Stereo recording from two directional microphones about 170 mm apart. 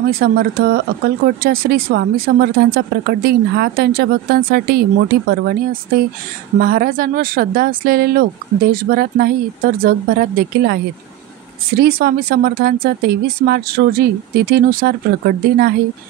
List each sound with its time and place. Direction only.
0.1 s speech: 60° right (ahead or behind)